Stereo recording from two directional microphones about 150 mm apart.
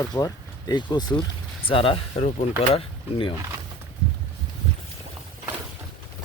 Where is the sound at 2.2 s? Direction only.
45° left (ahead or behind).